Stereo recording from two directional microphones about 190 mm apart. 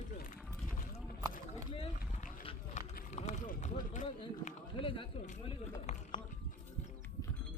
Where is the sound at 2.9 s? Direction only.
40° left (ahead or behind).